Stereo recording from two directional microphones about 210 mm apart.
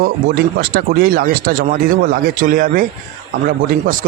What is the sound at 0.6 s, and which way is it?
Speech, 45° right (ahead or behind).